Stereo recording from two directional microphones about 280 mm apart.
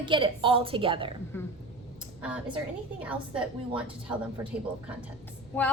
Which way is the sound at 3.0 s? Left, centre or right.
Centre.